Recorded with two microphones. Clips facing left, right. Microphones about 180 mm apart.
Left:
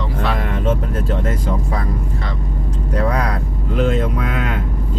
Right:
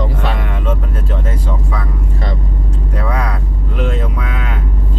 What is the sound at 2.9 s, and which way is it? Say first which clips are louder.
Vehicle: left 2 dB; 40° left (ahead or behind).